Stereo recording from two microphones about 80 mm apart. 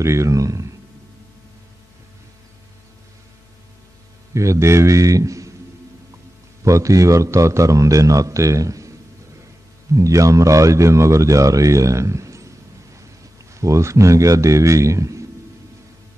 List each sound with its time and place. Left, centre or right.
0.0 s a man's voice: right
4.3 s a man's voice: right
6.6 s a man's voice: right
9.9 s a man's voice: right